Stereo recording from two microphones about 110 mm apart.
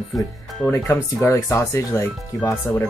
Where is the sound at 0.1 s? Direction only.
Centre (ahead or behind).